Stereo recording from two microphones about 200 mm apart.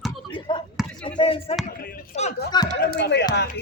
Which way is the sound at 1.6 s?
45° left (ahead or behind).